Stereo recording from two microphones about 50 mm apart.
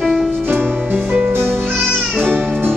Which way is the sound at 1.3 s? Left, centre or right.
Right.